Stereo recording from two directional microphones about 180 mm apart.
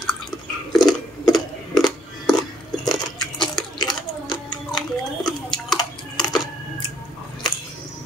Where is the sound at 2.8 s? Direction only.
25° left (ahead or behind).